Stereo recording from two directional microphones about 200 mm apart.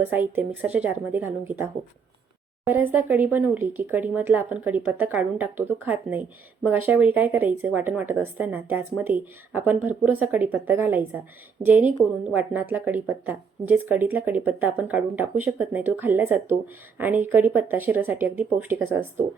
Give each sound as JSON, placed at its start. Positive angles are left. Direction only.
{"t": 0.0, "sound": "speech", "side_deg": -10}